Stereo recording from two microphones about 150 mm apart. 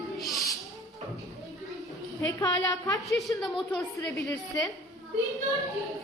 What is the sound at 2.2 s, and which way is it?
Speech, 25° left (ahead or behind).